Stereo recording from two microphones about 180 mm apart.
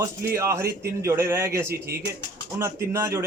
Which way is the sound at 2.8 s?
15° right (ahead or behind).